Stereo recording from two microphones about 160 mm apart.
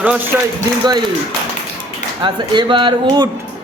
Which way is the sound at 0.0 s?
10° right (ahead or behind).